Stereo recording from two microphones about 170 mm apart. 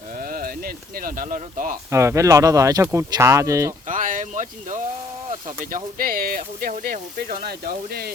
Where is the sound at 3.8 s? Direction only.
50° right (ahead or behind).